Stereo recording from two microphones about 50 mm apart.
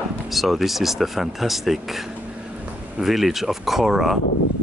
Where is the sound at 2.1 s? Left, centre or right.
Right.